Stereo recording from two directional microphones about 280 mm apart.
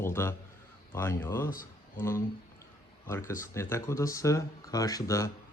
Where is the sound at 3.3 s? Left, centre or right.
Centre.